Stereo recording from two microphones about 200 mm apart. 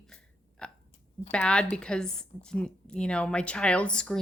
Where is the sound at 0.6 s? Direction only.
5° left (ahead or behind).